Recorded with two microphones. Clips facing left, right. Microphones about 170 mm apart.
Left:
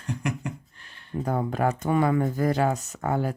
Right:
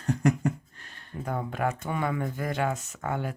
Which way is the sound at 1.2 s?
35° left (ahead or behind).